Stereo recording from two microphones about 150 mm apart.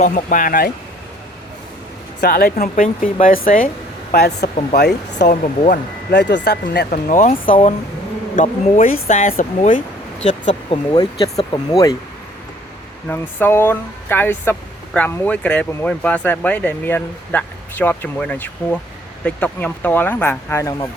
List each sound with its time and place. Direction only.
0.0 s speech: 60° left (ahead or behind)
2.2 s speech: 80° left
2.8 s speech: 60° left (ahead or behind)
4.1 s speech: 90° left
5.1 s speech: 60° left (ahead or behind)
10.2 s speech: 45° left (ahead or behind)
10.9 s speech: 30° left (ahead or behind)
13.1 s speech: 15° left (ahead or behind)